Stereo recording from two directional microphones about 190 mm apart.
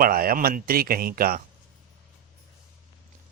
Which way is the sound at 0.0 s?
50° right (ahead or behind).